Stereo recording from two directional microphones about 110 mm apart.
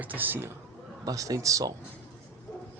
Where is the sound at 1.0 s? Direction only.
30° right (ahead or behind).